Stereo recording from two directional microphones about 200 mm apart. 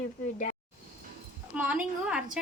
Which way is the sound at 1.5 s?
5° right (ahead or behind).